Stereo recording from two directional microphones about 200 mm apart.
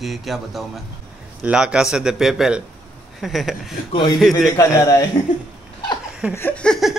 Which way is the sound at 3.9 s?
25° left (ahead or behind).